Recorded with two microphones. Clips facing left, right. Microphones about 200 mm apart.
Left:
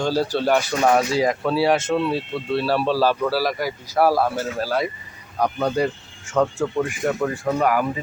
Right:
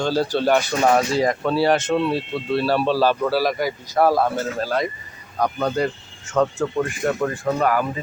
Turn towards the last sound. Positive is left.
turn(degrees=10)  # may be behind; listen again after turning